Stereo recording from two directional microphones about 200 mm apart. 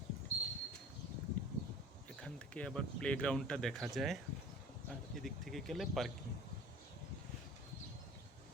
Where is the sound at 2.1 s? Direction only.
5° left (ahead or behind).